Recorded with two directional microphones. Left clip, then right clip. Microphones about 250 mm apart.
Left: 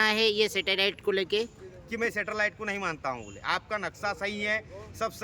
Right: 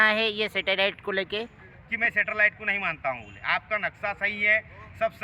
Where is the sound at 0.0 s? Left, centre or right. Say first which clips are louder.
Right 2 dB; centre.